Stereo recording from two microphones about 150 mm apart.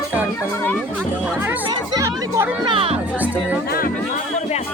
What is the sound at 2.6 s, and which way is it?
Speech, 40° right (ahead or behind).